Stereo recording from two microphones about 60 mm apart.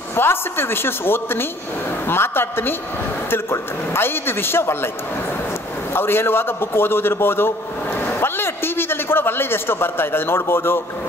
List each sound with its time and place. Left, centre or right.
0.1 s a man's voice: left
5.9 s a man's voice: left
8.0 s a sound: left